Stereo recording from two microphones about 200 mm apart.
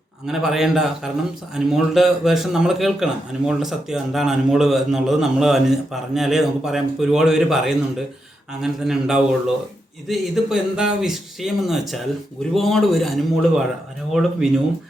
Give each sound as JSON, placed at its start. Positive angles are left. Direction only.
{"t": 0.3, "sound": "a man's voice", "side_deg": 0}